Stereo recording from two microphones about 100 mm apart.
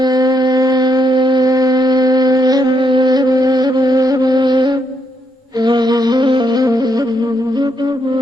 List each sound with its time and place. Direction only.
0.0 s wind instrument: 40° right (ahead or behind)
5.5 s music: 45° right (ahead or behind)